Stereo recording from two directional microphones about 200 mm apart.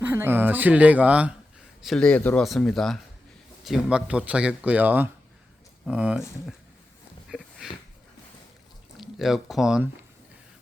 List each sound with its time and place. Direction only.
0.0 s speech: 10° right (ahead or behind)
7.3 s a sound: centre (ahead or behind)
9.0 s speech: centre (ahead or behind)